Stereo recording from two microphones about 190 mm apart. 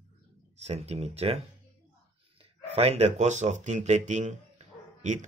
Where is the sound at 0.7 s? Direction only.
35° right (ahead or behind).